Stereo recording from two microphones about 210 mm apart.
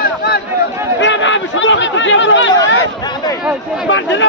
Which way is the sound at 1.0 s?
60° left (ahead or behind).